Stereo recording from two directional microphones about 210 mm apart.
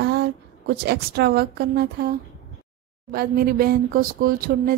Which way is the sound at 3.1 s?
45° right (ahead or behind).